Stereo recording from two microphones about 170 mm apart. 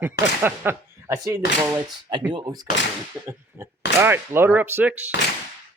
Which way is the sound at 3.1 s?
10° right (ahead or behind).